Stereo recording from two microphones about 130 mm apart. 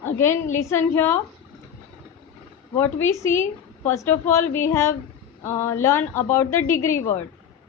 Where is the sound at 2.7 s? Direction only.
20° left (ahead or behind).